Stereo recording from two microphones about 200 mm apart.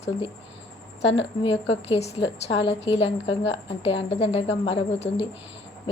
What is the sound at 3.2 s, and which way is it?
Speech, 65° left (ahead or behind).